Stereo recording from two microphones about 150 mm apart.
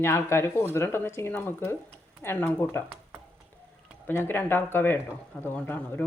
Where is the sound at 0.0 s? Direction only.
15° left (ahead or behind).